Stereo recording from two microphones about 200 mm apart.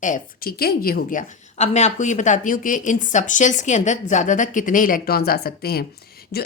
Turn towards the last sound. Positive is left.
turn(degrees=50)  # may be behind; listen again after turning